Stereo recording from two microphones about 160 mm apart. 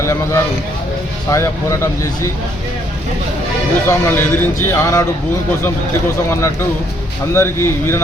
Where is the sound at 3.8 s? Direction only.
15° left (ahead or behind).